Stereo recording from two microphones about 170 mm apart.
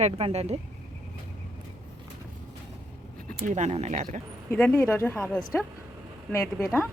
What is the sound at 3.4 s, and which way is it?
Speech, 45° right (ahead or behind).